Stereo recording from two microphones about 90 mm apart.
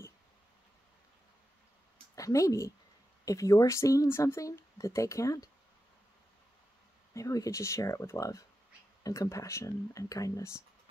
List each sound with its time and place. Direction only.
2.1 s speech: 35° left (ahead or behind)
7.2 s speech: 40° left (ahead or behind)